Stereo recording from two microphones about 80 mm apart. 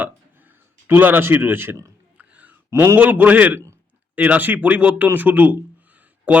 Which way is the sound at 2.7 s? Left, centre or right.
Right.